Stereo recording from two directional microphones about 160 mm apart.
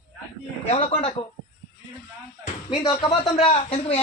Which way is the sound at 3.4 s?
35° left (ahead or behind).